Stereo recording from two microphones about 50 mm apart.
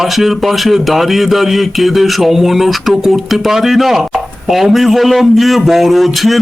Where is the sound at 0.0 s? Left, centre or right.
Centre.